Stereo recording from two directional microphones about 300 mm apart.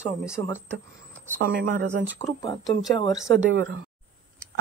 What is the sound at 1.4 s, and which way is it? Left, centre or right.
Speech, right.